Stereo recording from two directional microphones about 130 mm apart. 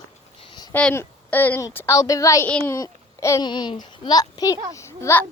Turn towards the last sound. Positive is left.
turn(degrees=20)  # may be behind; listen again after turning